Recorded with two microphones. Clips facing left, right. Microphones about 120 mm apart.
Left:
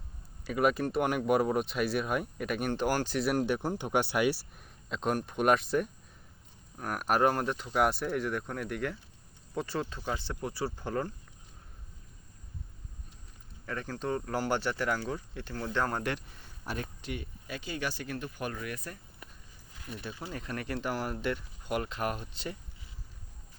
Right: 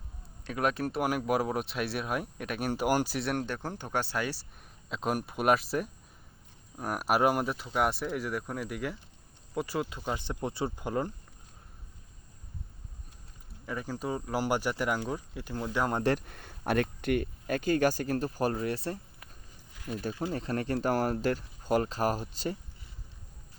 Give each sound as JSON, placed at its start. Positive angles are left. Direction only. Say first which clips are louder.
{"t": 0.4, "sound": "speech", "louder": "left 2 dB", "side_deg": 0}
{"t": 3.4, "sound": "speech", "louder": "left 5 dB", "side_deg": 15}
{"t": 4.9, "sound": "speech", "louder": "even", "side_deg": -5}
{"t": 13.7, "sound": "speech", "louder": "even", "side_deg": -10}
{"t": 16.2, "sound": "speech", "louder": "right 8 dB", "side_deg": -60}
{"t": 19.8, "sound": "speech", "louder": "right 7 dB", "side_deg": -40}